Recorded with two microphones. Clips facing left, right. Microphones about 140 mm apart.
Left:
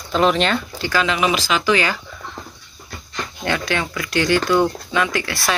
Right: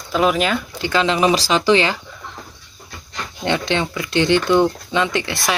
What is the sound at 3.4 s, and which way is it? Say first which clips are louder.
Speech: right 3 dB; 20° right (ahead or behind).